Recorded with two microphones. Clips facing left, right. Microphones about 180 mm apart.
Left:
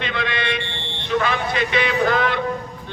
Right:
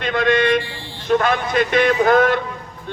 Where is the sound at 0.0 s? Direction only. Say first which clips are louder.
Right 8 dB; 45° right (ahead or behind).